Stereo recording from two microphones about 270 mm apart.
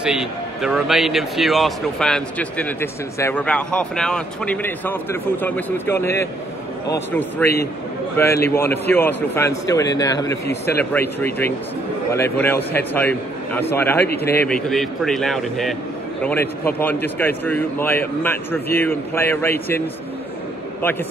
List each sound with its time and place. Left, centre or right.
0.0 s a man's voice: centre